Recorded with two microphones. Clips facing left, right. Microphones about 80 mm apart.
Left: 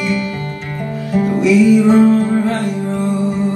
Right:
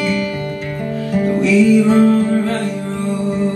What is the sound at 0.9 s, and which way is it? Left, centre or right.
Music, centre.